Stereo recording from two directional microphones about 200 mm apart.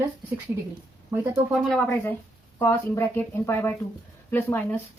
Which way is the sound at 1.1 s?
Centre (ahead or behind).